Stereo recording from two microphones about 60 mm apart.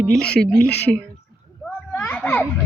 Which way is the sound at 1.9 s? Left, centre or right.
Left.